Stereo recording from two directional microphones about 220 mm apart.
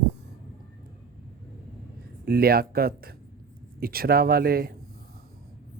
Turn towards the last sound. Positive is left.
turn(degrees=-45)  # may be behind; listen again after turning